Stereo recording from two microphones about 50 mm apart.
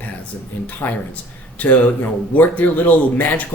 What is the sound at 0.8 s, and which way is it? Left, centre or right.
Speech, left.